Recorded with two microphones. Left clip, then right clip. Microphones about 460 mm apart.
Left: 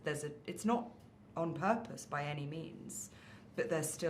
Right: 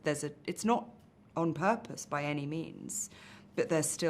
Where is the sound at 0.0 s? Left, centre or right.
Right.